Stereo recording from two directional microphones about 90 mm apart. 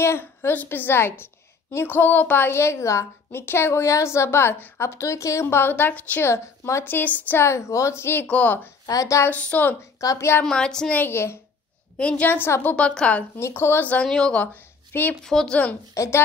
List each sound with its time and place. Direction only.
0.0 s a woman's voice: 25° left (ahead or behind)
6.2 s a woman's voice: 30° left (ahead or behind)
8.3 s speech: 15° left (ahead or behind)
8.8 s a woman's voice: 40° left (ahead or behind)
9.3 s speech: 15° left (ahead or behind)
9.9 s a woman's voice: 35° left (ahead or behind)
10.4 s speech: 5° left (ahead or behind)
11.0 s a woman's voice: 25° left (ahead or behind)
12.0 s a woman's voice: 15° left (ahead or behind)
12.7 s speech: 10° left (ahead or behind)
13.4 s a woman's voice: 25° left (ahead or behind)
14.0 s speech: 5° left (ahead or behind)
15.2 s speech: 5° left (ahead or behind)
15.9 s a woman's voice: 35° left (ahead or behind)